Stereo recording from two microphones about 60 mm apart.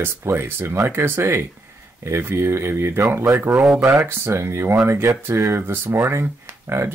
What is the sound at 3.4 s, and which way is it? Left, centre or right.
Speech, right.